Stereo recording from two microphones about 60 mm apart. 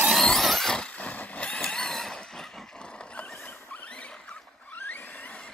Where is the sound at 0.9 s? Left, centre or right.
Left; by 2.4 s centre.